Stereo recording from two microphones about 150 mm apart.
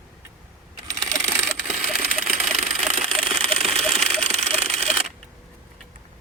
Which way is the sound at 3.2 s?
40° right (ahead or behind).